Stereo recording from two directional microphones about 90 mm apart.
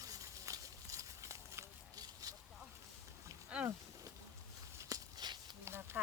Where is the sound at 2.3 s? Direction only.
45° right (ahead or behind).